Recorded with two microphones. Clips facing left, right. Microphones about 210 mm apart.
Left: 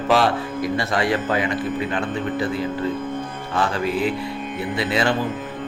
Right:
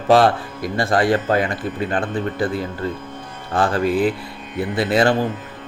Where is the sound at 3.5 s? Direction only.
50° right (ahead or behind).